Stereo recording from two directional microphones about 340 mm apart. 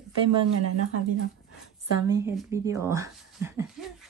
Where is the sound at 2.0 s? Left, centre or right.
Centre.